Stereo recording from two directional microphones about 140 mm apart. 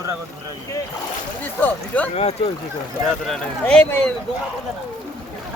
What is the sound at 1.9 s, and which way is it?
Speech, 10° left (ahead or behind).